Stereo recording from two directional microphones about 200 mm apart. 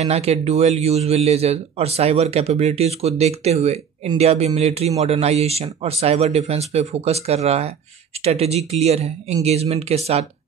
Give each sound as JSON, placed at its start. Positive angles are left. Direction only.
{"t": 0.0, "sound": "speech", "side_deg": -30}